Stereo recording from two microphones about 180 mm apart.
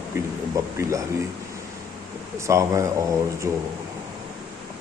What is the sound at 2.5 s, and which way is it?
Speech, 15° right (ahead or behind).